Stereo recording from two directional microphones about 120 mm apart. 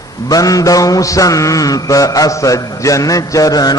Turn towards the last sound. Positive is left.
turn(degrees=30)  # may be behind; listen again after turning